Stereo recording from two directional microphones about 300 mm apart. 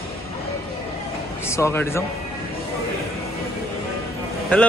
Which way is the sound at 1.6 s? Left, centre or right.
Centre.